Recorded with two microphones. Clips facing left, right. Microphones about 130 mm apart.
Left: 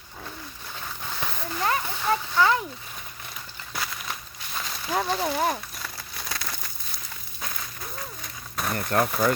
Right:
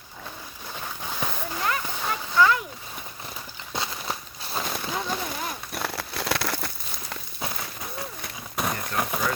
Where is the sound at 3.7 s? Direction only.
30° right (ahead or behind).